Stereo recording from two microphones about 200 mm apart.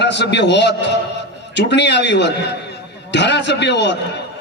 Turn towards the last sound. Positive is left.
turn(degrees=60)  # may be behind; listen again after turning